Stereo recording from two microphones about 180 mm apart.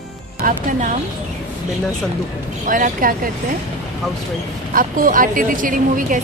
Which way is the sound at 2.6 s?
50° right (ahead or behind).